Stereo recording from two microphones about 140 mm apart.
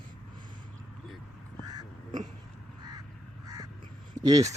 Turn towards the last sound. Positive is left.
turn(degrees=-25)  # may be behind; listen again after turning